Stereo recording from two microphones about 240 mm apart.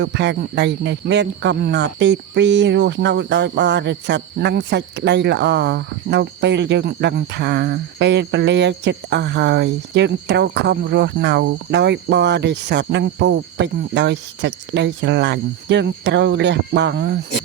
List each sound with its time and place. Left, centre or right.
0.0 s speech: right